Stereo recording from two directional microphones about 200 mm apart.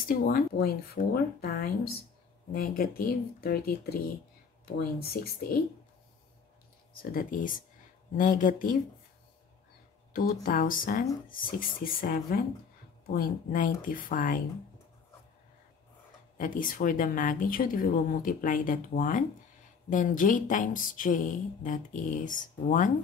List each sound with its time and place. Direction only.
0.1 s speech: 45° left (ahead or behind)
7.0 s speech: 45° left (ahead or behind)
10.1 s speech: 45° left (ahead or behind)
16.3 s speech: 45° left (ahead or behind)